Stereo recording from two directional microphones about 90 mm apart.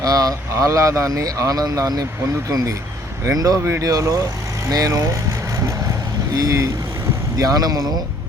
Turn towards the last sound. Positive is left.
turn(degrees=-45)  # may be behind; listen again after turning